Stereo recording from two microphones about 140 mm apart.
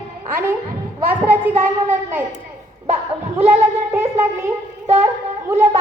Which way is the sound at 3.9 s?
20° right (ahead or behind).